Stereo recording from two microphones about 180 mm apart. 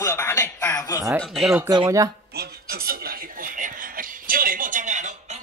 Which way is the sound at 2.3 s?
60° right (ahead or behind).